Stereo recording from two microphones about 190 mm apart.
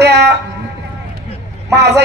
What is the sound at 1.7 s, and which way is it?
Speech, 60° right (ahead or behind).